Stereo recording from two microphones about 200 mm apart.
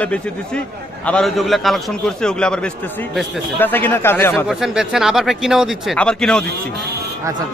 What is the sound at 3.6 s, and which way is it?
Speech, 10° left (ahead or behind).